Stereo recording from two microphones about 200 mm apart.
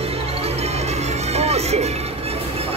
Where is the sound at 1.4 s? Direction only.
30° right (ahead or behind).